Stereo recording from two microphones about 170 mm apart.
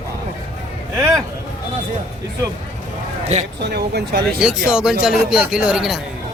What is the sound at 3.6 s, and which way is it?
Speech, 70° right (ahead or behind).